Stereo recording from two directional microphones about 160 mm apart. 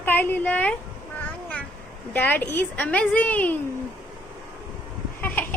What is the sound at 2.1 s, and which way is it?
A woman's voice, 10° left (ahead or behind).